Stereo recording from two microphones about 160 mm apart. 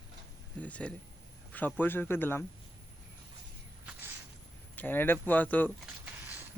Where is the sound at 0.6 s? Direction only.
10° left (ahead or behind).